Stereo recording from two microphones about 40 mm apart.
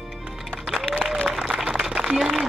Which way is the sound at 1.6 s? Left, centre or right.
Centre.